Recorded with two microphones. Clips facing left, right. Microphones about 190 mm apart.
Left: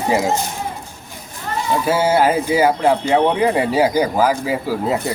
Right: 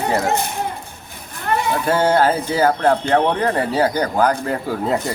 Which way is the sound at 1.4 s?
60° right (ahead or behind).